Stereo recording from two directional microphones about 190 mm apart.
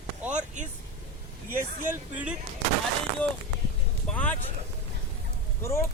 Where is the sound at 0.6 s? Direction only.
40° right (ahead or behind).